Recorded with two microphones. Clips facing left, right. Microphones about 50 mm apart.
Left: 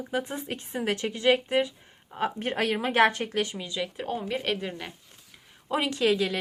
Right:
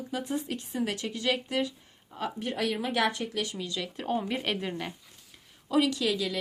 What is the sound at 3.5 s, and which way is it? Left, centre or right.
Speech, left.